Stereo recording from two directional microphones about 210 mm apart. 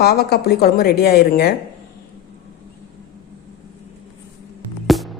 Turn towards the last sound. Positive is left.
turn(degrees=0)  # may be behind; listen again after turning